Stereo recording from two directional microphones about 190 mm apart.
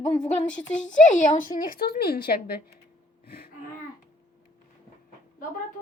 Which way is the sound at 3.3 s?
55° left (ahead or behind).